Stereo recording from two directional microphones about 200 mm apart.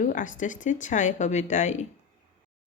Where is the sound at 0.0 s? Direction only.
40° left (ahead or behind).